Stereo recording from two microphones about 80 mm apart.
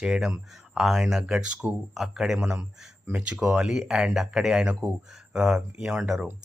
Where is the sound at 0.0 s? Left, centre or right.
Centre.